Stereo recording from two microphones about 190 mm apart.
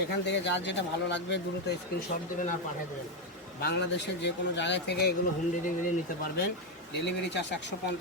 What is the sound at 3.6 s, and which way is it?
Speech, 65° left (ahead or behind).